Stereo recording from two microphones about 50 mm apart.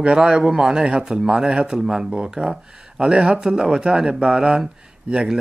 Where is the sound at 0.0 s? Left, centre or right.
Centre.